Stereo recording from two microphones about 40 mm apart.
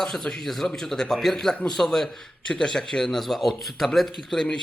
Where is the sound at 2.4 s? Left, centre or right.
Left; by 4.4 s centre.